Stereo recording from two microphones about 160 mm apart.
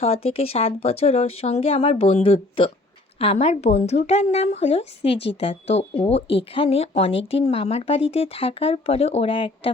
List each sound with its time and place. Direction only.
0.0 s a woman's voice: 40° left (ahead or behind)